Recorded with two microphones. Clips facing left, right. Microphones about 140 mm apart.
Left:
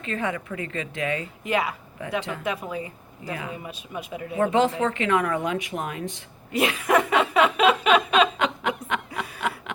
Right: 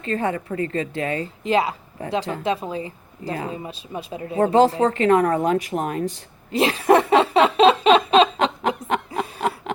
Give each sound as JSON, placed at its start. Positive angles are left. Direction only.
{"t": 0.0, "sound": "a woman's voice", "side_deg": -35}